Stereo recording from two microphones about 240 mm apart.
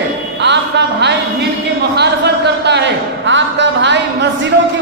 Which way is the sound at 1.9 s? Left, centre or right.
Right.